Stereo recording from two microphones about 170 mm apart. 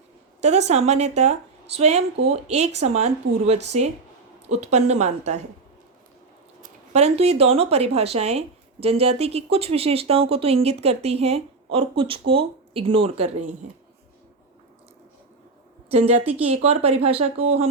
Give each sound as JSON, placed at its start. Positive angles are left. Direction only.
{"t": 0.4, "sound": "speech", "side_deg": -40}
{"t": 6.6, "sound": "speech", "side_deg": -40}
{"t": 15.9, "sound": "speech", "side_deg": -40}